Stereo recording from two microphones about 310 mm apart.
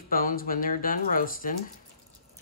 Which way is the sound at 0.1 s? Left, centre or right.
Left.